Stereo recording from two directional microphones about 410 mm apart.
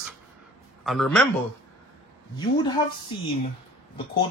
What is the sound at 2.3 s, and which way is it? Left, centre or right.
Speech, centre.